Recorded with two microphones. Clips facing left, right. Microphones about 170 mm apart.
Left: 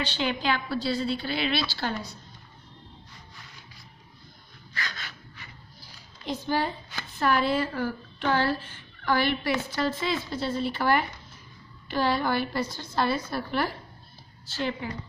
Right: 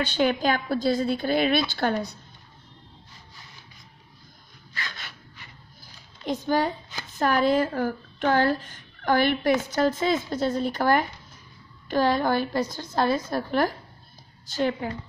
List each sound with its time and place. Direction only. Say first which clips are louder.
0.0 s speech: right 5 dB; 50° right (ahead or behind)
6.2 s a woman's voice: right 4 dB; 50° right (ahead or behind)